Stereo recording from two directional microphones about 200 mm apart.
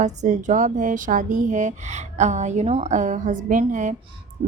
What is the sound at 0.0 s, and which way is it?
A woman's voice, 35° right (ahead or behind).